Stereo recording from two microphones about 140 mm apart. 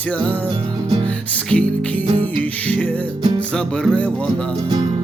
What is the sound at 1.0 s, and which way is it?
Music, 10° left (ahead or behind).